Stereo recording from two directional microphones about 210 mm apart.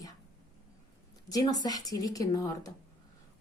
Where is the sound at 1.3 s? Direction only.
20° left (ahead or behind).